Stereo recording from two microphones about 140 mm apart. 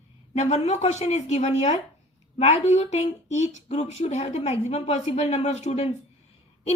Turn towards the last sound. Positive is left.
turn(degrees=50)  # may be behind; listen again after turning